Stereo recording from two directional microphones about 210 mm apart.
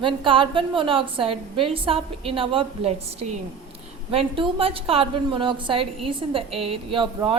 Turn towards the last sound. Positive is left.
turn(degrees=-25)  # may be behind; listen again after turning